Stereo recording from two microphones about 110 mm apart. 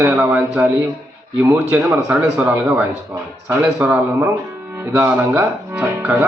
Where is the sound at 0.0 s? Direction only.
15° right (ahead or behind).